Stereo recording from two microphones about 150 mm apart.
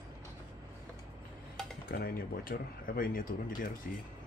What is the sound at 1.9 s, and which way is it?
Speech, 80° left.